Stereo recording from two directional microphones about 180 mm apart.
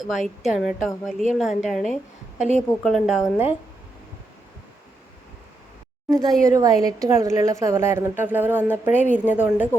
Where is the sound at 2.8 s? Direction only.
Centre (ahead or behind).